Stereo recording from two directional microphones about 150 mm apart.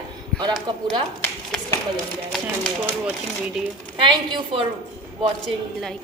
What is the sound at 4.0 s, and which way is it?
Speech, 35° right (ahead or behind).